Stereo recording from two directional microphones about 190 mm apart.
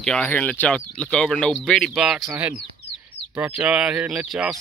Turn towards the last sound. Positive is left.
turn(degrees=-5)  # may be behind; listen again after turning